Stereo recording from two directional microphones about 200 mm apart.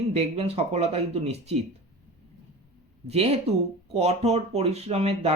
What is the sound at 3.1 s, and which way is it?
Speech, 30° right (ahead or behind).